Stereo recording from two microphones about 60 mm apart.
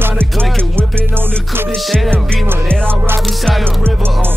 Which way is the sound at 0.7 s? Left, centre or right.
Right.